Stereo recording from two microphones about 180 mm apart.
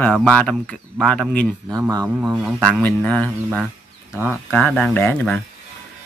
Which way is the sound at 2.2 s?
5° right (ahead or behind).